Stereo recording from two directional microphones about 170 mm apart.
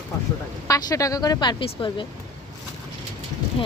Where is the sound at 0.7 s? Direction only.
20° left (ahead or behind).